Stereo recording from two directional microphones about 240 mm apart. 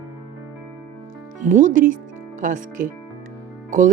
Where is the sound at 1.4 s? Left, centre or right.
Right.